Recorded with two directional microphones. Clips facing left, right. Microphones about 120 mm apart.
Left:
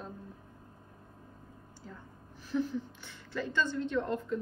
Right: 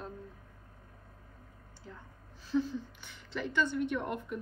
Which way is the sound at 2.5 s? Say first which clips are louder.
Right 1 dB; 15° left (ahead or behind).